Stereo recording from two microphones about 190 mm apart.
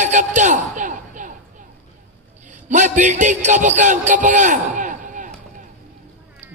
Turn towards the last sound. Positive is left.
turn(degrees=-40)  # may be behind; listen again after turning